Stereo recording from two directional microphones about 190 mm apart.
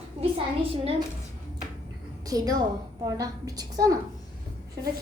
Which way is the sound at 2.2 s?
20° right (ahead or behind).